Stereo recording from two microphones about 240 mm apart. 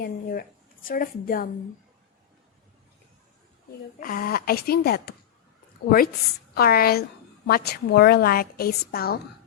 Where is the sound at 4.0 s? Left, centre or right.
Left.